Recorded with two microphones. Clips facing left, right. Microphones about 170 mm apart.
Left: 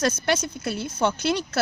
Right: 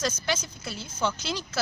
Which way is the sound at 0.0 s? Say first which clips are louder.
Left 6 dB; 65° left (ahead or behind).